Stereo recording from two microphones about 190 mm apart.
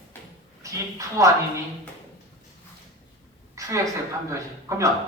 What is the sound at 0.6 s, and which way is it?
Speech, 15° right (ahead or behind).